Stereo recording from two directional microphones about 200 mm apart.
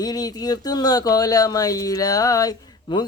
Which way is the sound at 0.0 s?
20° left (ahead or behind).